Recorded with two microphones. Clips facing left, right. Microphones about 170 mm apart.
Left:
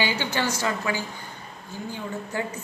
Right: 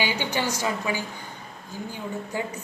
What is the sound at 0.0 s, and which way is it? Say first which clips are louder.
A woman's voice: left 1 dB; 15° right (ahead or behind).